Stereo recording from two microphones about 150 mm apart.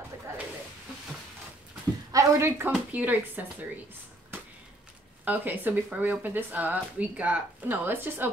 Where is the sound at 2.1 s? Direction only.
15° right (ahead or behind).